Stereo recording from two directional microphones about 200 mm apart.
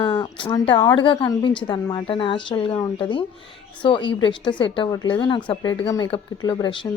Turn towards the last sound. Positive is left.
turn(degrees=25)  # may be behind; listen again after turning